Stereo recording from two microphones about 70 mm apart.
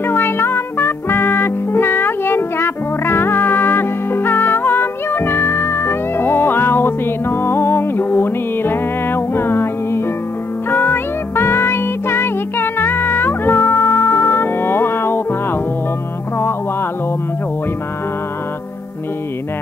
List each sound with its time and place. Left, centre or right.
0.0 s music: left